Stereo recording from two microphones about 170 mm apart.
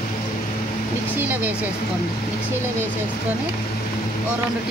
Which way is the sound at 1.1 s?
10° right (ahead or behind).